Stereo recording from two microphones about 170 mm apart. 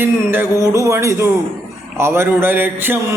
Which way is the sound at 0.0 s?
15° right (ahead or behind).